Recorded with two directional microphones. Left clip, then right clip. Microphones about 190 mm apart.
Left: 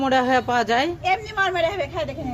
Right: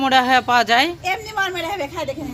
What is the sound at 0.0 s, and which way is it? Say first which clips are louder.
Speech: right 4 dB; 5° right (ahead or behind).